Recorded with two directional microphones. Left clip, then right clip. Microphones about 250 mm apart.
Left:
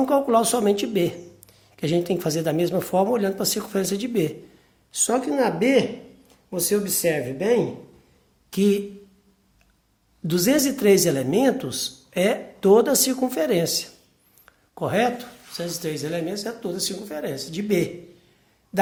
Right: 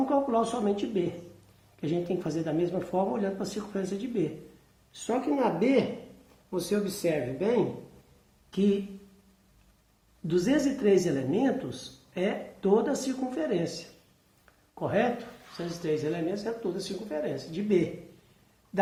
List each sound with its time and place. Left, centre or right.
0.0 s speech: left
10.2 s speech: left